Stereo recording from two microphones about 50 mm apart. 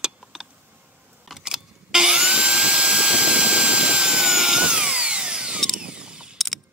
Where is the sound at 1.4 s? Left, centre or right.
Centre.